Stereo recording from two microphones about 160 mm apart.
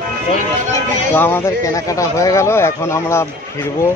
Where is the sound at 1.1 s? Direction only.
15° left (ahead or behind).